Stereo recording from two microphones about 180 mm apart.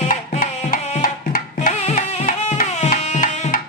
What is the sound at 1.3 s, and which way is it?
Tabla, 45° left (ahead or behind).